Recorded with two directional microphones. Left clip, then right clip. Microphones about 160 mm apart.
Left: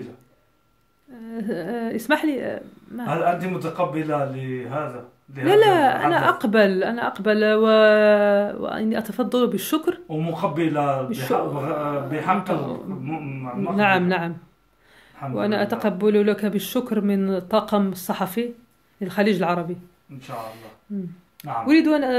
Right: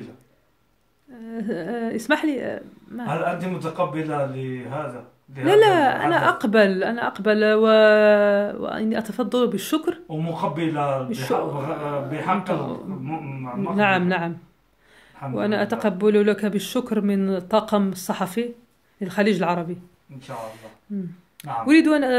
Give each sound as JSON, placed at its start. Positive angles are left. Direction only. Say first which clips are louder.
{"t": 1.1, "sound": "speech", "louder": "even", "side_deg": 0}
{"t": 5.3, "sound": "speech", "louder": "even", "side_deg": 0}
{"t": 15.3, "sound": "speech", "louder": "even", "side_deg": 0}
{"t": 21.4, "sound": "speech", "louder": "right 1 dB", "side_deg": -15}